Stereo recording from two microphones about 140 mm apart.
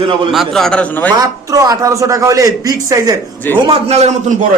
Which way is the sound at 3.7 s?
50° right (ahead or behind).